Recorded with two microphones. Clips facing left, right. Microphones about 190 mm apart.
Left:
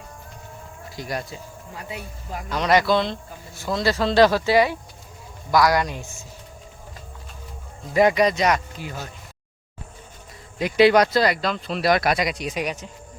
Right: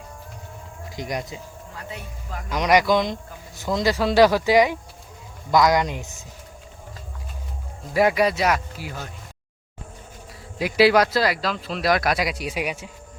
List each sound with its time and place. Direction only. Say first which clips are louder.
0.9 s speech: right 1 dB; 20° right (ahead or behind)
1.7 s speech: left 2 dB; 15° left (ahead or behind)
2.5 s speech: right 1 dB; 15° right (ahead or behind)
7.9 s speech: left 1 dB; 5° right (ahead or behind)
10.6 s speech: left 1 dB; 5° right (ahead or behind)